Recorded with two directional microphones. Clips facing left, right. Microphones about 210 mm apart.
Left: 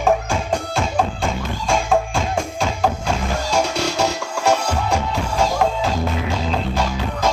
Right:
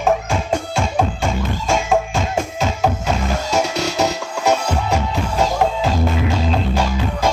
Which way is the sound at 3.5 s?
5° right (ahead or behind).